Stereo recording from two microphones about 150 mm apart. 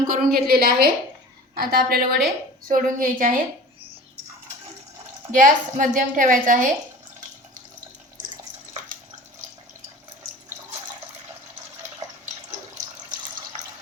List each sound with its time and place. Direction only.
0.1 s a woman's voice: 75° right (ahead or behind)
2.2 s a woman's voice: 65° right (ahead or behind)
5.3 s a woman's voice: 60° right (ahead or behind)